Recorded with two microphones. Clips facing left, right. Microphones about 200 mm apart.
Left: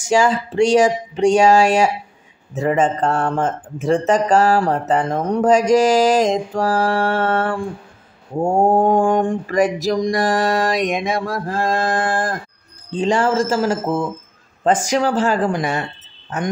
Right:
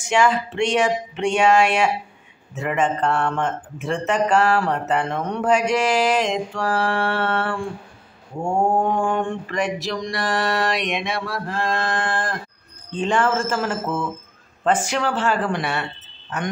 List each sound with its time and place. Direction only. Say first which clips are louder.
0.1 s speech: left 3 dB; 35° left (ahead or behind)